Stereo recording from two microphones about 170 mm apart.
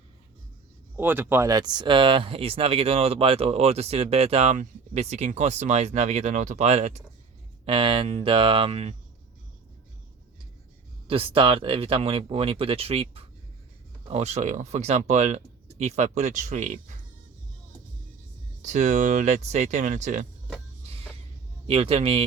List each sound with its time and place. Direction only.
0.9 s speech: 10° right (ahead or behind); by 7.0 s 40° right (ahead or behind)
7.6 s speech: 30° right (ahead or behind)
11.1 s speech: 30° right (ahead or behind); by 16.8 s 45° right (ahead or behind)
18.6 s speech: 45° right (ahead or behind)
20.8 s music: 35° right (ahead or behind)
21.7 s speech: 35° right (ahead or behind)